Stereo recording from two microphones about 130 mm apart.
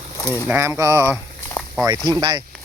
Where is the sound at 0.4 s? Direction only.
20° right (ahead or behind).